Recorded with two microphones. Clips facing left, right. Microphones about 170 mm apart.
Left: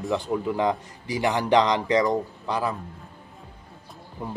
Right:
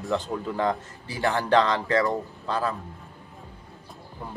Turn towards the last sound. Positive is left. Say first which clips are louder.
# left 5 dB
turn(degrees=20)  # may be behind; listen again after turning